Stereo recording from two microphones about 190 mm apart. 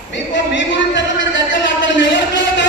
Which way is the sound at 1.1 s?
75° left (ahead or behind).